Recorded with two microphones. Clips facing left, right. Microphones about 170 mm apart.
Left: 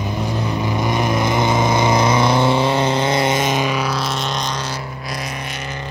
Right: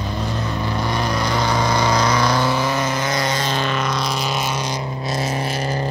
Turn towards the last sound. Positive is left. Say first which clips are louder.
# right 6 dB
turn(degrees=-35)  # may be behind; listen again after turning